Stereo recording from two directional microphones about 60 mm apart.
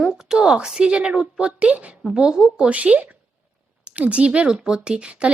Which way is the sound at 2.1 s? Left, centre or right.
Centre.